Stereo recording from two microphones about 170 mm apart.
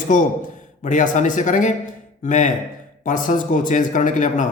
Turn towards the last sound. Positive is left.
turn(degrees=45)  # may be behind; listen again after turning